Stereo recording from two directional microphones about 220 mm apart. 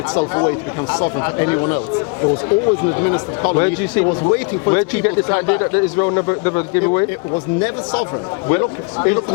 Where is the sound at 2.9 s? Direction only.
25° left (ahead or behind).